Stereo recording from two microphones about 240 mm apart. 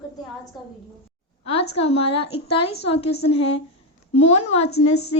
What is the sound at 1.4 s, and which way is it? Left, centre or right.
A woman's voice, left.